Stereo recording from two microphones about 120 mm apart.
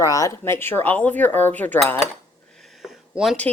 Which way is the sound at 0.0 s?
30° left (ahead or behind).